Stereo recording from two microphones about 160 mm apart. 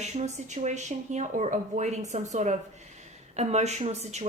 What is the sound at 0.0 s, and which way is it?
Speech, 45° right (ahead or behind).